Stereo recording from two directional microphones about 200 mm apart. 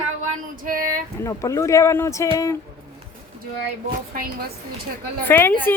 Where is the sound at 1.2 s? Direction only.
15° left (ahead or behind).